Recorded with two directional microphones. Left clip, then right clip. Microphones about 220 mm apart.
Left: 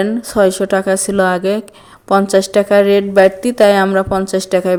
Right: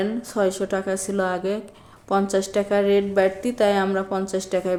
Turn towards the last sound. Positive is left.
turn(degrees=40)  # may be behind; listen again after turning